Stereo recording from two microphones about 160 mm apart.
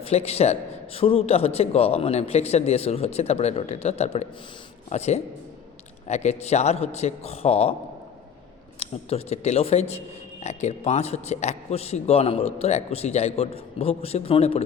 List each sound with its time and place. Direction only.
0.0 s a man's voice: 40° left (ahead or behind)
8.8 s a man's voice: 40° left (ahead or behind)